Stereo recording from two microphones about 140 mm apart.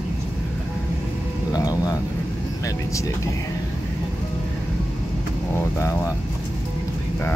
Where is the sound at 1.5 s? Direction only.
25° left (ahead or behind).